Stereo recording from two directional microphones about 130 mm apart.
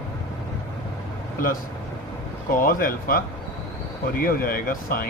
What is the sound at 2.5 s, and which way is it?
Speech, 90° left.